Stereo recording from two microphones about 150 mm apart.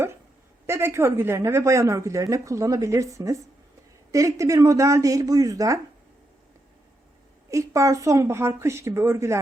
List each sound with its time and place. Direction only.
0.7 s a woman's voice: 15° right (ahead or behind)
7.5 s a woman's voice: 20° right (ahead or behind)